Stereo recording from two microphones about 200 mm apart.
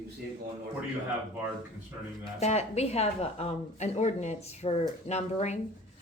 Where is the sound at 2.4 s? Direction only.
35° left (ahead or behind).